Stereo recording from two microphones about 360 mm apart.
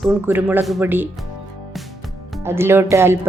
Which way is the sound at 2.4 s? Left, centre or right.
Centre.